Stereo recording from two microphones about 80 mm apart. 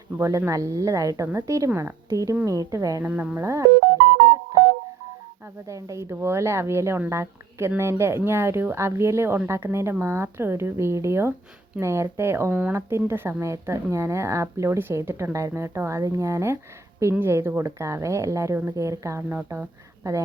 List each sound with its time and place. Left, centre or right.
0.2 s speech: right
3.0 s speech: centre
3.4 s speech: right
5.6 s speech: right
9.6 s speech: right
10.0 s speech: right